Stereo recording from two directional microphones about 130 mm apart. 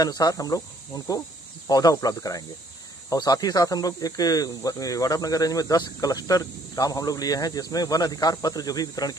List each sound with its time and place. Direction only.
0.0 s speech: 30° left (ahead or behind)